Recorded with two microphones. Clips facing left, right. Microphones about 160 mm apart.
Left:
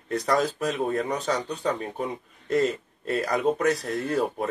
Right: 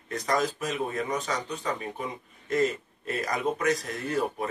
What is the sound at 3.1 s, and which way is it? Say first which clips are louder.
Speech: left 5 dB; 35° left (ahead or behind).